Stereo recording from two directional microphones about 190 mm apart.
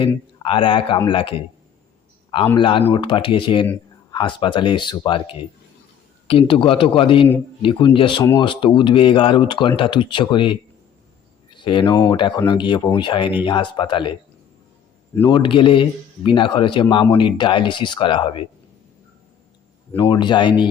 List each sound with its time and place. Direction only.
0.0 s speech: 25° left (ahead or behind)
2.6 s speech: 25° left (ahead or behind)
15.3 s speech: 25° left (ahead or behind)
20.0 s speech: 25° left (ahead or behind)